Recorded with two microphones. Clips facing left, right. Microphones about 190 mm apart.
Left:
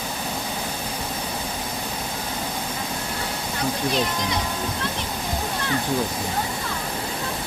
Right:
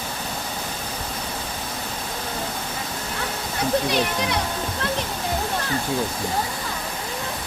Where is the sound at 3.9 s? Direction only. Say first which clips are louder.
Right 1 dB; 65° right (ahead or behind).